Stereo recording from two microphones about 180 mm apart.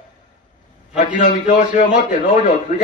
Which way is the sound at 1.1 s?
45° left (ahead or behind).